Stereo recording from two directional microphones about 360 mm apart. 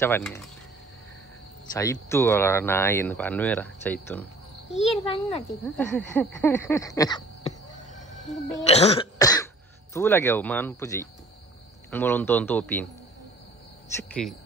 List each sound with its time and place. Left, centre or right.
0.0 s speech: centre
1.7 s speech: centre
4.7 s speech: centre
5.8 s a sound: centre
8.6 s cough: centre
9.9 s speech: centre
14.2 s speech: centre